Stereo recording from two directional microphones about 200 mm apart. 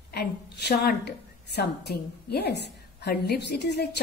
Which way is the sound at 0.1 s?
55° left (ahead or behind).